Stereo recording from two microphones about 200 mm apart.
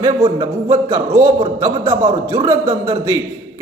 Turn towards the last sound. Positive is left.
turn(degrees=-15)  # may be behind; listen again after turning